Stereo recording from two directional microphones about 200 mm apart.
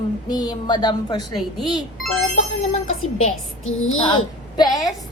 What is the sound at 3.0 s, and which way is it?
Speech, 90° left.